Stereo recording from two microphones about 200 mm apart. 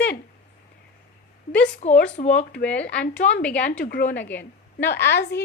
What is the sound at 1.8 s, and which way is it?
Speech, 35° left (ahead or behind).